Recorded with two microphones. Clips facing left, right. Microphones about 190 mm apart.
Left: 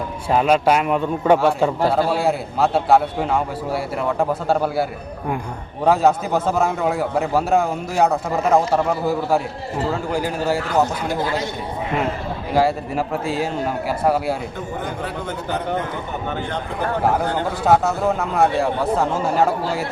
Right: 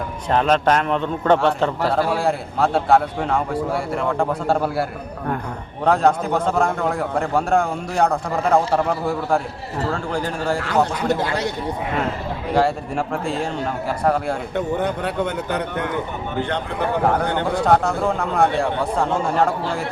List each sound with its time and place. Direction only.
0.3 s a man's voice: 10° left (ahead or behind)
12.5 s a man's voice: 5° left (ahead or behind)
15.0 s a man's voice: 70° right (ahead or behind)
17.3 s a man's voice: 5° left (ahead or behind)